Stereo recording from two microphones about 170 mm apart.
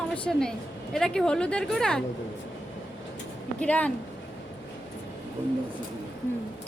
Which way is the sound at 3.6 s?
5° left (ahead or behind).